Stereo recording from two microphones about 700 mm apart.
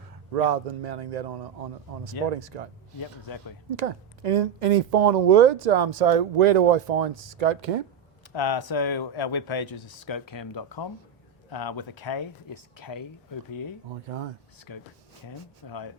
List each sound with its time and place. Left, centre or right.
0.3 s speech: right
3.7 s speech: right
8.3 s speech: left